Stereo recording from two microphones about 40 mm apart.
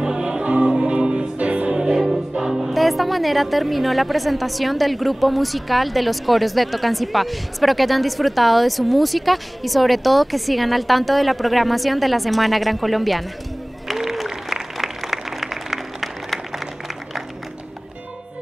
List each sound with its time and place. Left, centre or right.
0.0 s music: centre
2.0 s choir: centre
2.7 s a woman's voice: centre
13.8 s applause: centre